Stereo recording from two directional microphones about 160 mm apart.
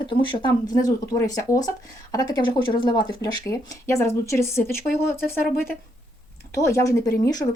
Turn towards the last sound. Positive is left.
turn(degrees=20)  # may be behind; listen again after turning